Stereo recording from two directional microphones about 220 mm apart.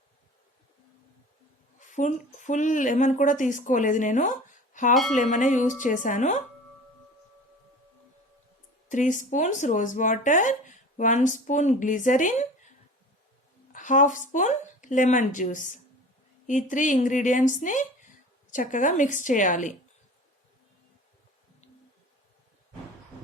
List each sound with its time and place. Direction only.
1.8 s speech: 35° left (ahead or behind)
8.9 s speech: 35° left (ahead or behind)
13.7 s speech: 35° left (ahead or behind)